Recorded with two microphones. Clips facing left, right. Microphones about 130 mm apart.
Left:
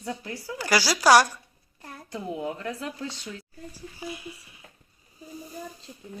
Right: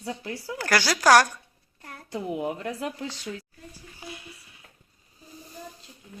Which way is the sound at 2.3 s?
20° right (ahead or behind).